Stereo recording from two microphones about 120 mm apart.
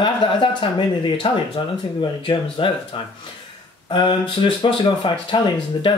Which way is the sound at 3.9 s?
45° left (ahead or behind).